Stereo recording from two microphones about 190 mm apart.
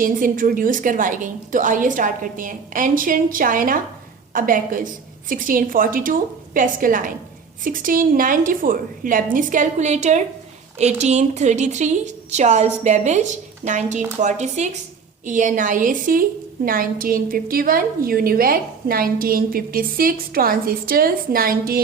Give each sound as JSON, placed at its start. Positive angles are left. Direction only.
{"t": 0.0, "sound": "a woman's voice", "side_deg": -45}